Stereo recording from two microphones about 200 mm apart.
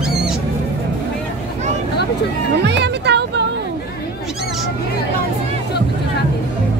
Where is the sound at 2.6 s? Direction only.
60° right (ahead or behind).